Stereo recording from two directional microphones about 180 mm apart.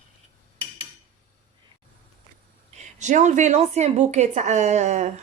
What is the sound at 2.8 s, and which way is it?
Speech, 40° right (ahead or behind).